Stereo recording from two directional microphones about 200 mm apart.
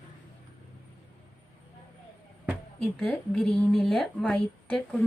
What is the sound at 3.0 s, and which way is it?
A woman's voice, 5° left (ahead or behind).